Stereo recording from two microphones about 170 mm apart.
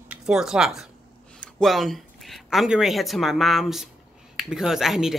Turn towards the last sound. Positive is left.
turn(degrees=0)  # may be behind; listen again after turning